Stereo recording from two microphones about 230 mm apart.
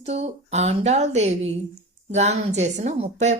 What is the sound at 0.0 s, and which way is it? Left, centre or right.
A woman's voice, right.